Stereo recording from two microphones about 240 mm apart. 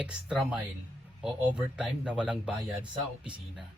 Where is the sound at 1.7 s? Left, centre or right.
Centre.